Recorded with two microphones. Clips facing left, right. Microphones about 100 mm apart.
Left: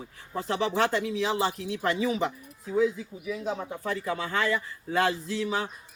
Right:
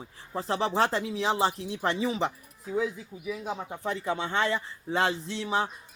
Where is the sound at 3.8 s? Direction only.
25° right (ahead or behind).